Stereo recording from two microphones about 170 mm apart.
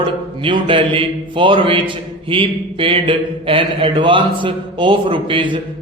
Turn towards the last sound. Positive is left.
turn(degrees=-30)  # may be behind; listen again after turning